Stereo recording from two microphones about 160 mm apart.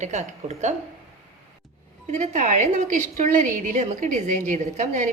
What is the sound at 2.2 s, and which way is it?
A woman's voice, 45° right (ahead or behind).